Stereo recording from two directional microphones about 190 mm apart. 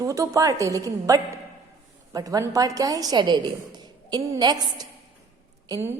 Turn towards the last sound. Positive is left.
turn(degrees=-15)  # may be behind; listen again after turning